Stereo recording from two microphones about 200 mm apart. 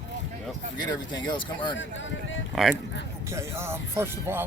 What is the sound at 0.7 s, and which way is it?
Speech, 20° left (ahead or behind).